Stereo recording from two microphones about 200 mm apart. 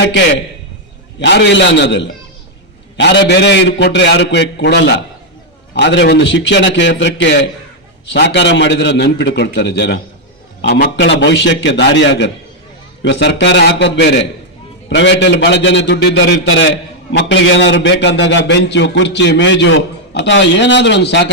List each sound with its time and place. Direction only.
1.2 s a man's voice: 60° left (ahead or behind)